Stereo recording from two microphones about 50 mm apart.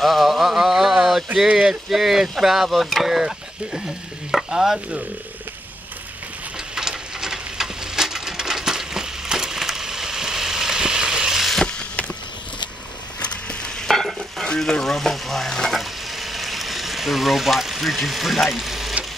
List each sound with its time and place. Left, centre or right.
0.0 s a sound: centre
1.5 s speech: centre
4.5 s stir: centre
6.7 s a sound: centre
13.2 s mechanisms: left
13.8 s stir: centre